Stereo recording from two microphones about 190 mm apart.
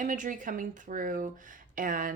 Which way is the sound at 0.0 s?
45° right (ahead or behind).